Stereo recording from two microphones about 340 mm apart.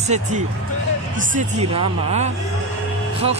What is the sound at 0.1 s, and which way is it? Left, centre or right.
Speech, centre.